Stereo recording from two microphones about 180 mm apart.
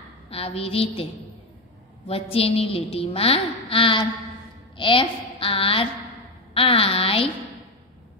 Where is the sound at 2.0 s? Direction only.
30° left (ahead or behind).